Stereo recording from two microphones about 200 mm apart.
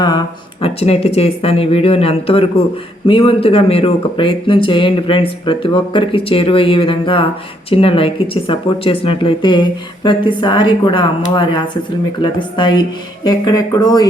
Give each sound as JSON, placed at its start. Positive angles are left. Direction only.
{"t": 0.6, "sound": "speech", "side_deg": 30}
{"t": 12.2, "sound": "speech", "side_deg": 20}